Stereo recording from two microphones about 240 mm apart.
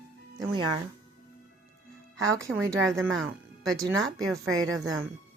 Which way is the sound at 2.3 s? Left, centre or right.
Centre.